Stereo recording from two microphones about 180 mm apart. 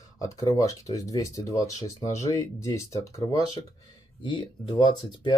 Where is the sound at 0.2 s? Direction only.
20° left (ahead or behind).